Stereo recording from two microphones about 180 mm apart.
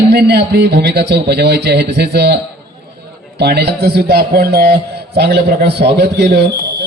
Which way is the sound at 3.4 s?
60° right (ahead or behind).